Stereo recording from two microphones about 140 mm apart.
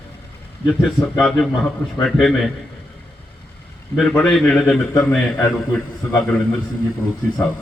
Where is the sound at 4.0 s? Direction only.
5° left (ahead or behind).